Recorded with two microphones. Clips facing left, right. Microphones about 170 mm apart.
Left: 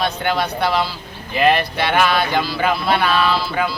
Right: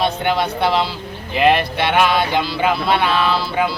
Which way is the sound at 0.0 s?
25° right (ahead or behind).